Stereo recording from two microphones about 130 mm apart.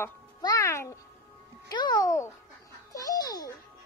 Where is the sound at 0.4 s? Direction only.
25° left (ahead or behind).